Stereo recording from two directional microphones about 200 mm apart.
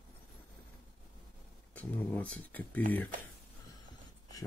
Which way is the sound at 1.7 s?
5° left (ahead or behind).